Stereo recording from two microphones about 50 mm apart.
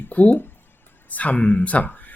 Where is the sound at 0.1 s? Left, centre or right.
Left.